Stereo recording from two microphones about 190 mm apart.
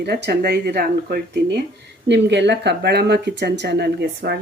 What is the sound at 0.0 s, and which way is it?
Speech, 55° right (ahead or behind).